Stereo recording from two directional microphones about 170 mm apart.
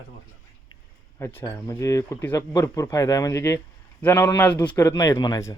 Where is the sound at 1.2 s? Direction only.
10° left (ahead or behind).